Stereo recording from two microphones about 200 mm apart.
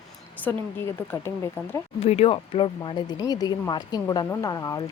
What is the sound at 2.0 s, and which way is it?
Speech, 30° left (ahead or behind).